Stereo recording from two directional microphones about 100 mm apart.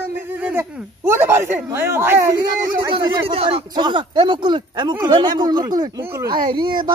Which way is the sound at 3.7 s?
50° right (ahead or behind).